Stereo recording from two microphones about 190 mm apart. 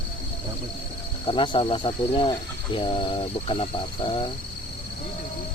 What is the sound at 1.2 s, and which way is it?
Speech, 25° left (ahead or behind).